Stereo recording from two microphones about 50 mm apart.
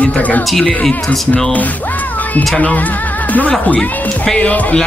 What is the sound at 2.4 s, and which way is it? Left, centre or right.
Speech, left.